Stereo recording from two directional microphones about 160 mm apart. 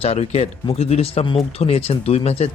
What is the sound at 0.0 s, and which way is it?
Speech, 40° left (ahead or behind).